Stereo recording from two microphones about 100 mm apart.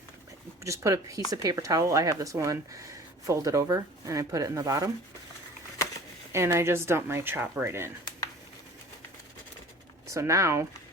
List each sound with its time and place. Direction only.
0.6 s speech: 30° right (ahead or behind)
6.3 s speech: 25° right (ahead or behind)
10.1 s speech: 30° right (ahead or behind)